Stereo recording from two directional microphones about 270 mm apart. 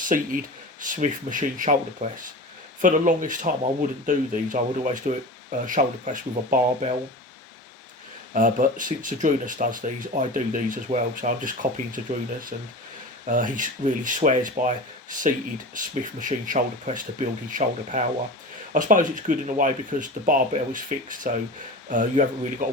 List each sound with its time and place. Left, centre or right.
0.0 s speech: right
8.3 s speech: right
13.2 s speech: right
15.7 s speech: right